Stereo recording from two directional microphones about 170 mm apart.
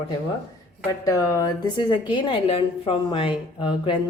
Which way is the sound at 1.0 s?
20° left (ahead or behind).